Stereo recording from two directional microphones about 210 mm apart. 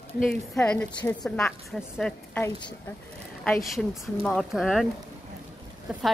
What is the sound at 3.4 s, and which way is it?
A woman's voice, centre (ahead or behind).